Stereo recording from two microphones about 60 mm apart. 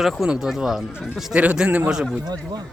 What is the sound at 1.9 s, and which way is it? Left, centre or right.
Speech, centre.